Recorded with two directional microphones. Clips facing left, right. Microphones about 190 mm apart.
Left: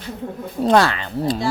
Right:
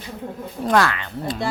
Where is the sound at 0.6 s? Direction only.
30° left (ahead or behind).